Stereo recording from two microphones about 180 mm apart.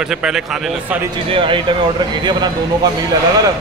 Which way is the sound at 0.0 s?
5° right (ahead or behind).